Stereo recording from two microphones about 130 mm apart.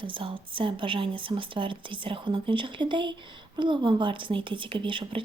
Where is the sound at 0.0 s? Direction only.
40° right (ahead or behind).